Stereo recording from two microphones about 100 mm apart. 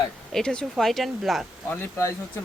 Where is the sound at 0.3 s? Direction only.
5° left (ahead or behind).